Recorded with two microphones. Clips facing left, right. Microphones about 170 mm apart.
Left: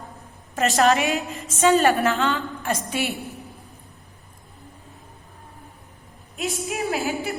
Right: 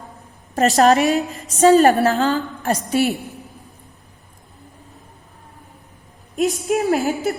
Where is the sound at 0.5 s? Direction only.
35° right (ahead or behind).